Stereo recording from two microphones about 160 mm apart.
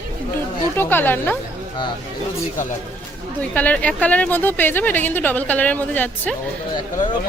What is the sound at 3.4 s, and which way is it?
A woman's voice, 10° left (ahead or behind).